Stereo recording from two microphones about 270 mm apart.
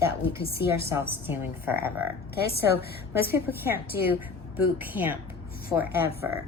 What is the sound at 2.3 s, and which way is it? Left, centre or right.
Speech, left.